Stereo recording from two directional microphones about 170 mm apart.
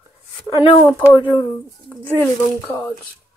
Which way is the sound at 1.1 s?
25° left (ahead or behind).